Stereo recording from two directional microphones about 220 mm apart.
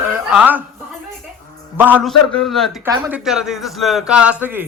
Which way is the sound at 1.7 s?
10° right (ahead or behind).